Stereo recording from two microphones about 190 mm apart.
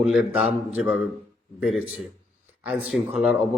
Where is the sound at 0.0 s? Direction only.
5° right (ahead or behind).